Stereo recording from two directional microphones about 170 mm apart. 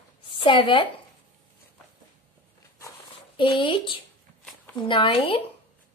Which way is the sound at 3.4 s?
30° left (ahead or behind).